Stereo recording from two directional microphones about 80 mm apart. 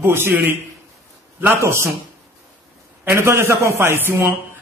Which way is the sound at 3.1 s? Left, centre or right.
Right.